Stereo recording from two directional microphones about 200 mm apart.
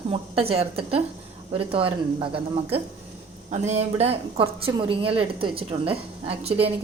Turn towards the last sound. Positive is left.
turn(degrees=-30)  # may be behind; listen again after turning